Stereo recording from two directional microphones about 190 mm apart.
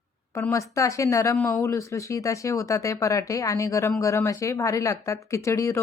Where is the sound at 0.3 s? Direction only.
15° left (ahead or behind).